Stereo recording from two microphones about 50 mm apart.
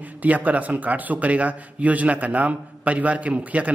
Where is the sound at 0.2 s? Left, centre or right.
Right.